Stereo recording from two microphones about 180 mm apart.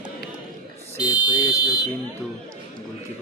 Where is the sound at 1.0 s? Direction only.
20° left (ahead or behind).